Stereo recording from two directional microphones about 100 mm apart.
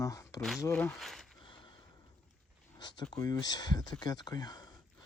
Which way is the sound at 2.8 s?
45° left (ahead or behind).